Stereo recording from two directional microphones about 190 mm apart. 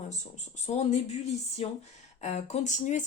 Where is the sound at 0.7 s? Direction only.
35° left (ahead or behind).